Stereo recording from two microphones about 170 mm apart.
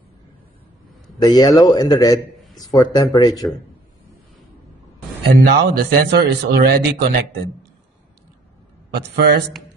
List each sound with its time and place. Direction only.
1.2 s a man's voice: 20° left (ahead or behind)
5.3 s speech: 70° right (ahead or behind)
6.2 s speech: 65° right (ahead or behind)
8.9 s speech: 75° right (ahead or behind)